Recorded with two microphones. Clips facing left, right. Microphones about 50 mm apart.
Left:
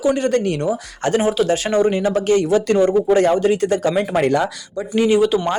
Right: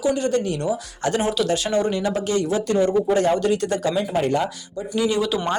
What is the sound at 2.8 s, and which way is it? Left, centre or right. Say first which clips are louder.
Speech: left 4 dB; left.